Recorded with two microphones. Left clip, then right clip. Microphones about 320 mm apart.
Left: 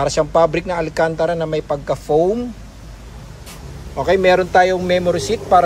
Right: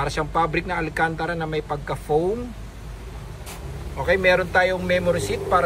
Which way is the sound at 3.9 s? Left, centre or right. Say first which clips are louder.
Left 5 dB; centre.